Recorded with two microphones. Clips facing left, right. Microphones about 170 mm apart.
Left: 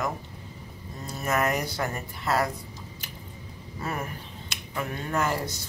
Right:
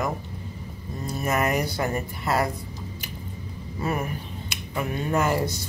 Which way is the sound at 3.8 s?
10° right (ahead or behind).